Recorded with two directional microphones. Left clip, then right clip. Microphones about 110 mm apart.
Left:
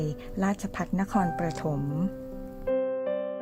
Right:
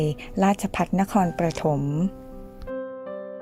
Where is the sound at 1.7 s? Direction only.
10° right (ahead or behind).